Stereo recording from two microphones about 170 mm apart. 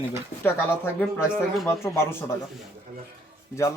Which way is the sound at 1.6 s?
15° left (ahead or behind).